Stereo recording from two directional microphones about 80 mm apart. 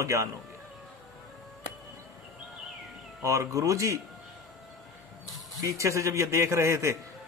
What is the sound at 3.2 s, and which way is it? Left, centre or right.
Speech, right.